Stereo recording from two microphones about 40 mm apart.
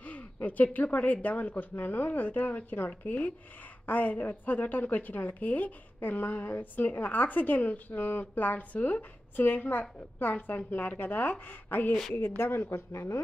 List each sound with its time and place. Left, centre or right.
0.0 s a sound: left
0.7 s a woman's voice: left
12.2 s speech: left